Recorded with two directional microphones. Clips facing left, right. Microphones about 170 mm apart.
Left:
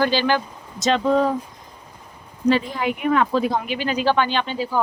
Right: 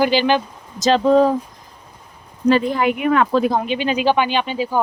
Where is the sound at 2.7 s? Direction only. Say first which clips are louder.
Right 4 dB; 70° right (ahead or behind).